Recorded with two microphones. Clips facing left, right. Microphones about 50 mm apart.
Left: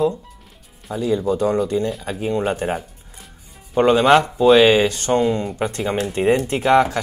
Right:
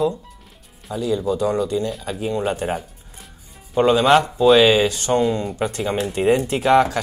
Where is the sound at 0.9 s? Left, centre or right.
Left.